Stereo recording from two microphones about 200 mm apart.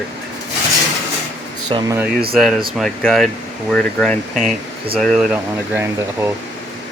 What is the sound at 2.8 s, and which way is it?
Speech, centre (ahead or behind).